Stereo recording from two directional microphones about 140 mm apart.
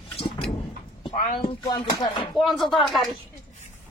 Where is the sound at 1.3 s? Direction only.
35° left (ahead or behind).